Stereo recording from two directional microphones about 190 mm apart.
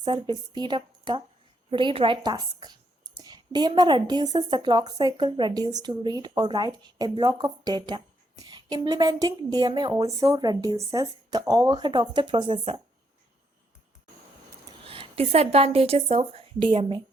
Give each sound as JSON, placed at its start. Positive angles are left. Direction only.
{"t": 0.0, "sound": "a woman's voice", "side_deg": -25}
{"t": 14.6, "sound": "a sound", "side_deg": -25}
{"t": 15.5, "sound": "a woman's voice", "side_deg": -30}